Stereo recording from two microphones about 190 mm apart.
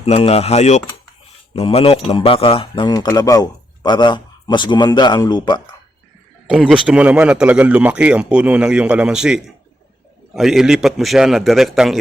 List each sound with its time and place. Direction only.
0.0 s speech: 30° left (ahead or behind)
6.5 s speech: 5° right (ahead or behind)